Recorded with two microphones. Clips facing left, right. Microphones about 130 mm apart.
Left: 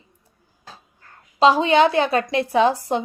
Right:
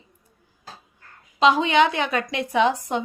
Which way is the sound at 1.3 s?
35° left (ahead or behind).